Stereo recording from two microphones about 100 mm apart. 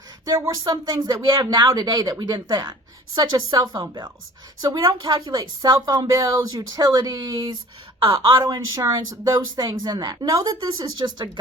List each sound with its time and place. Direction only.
0.3 s a woman's voice: 35° right (ahead or behind)